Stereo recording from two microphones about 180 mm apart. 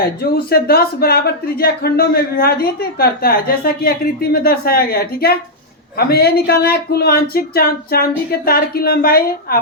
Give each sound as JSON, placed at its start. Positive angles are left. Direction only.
{"t": 0.0, "sound": "speech", "side_deg": 60}